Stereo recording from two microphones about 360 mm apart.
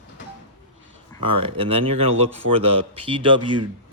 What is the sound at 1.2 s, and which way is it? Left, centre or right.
Speech, centre.